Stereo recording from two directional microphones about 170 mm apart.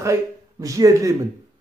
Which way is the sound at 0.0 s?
20° right (ahead or behind).